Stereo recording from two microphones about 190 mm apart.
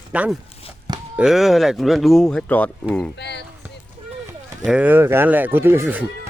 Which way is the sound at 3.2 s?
60° left (ahead or behind).